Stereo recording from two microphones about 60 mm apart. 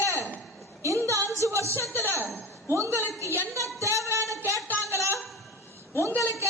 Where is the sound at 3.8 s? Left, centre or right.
Right.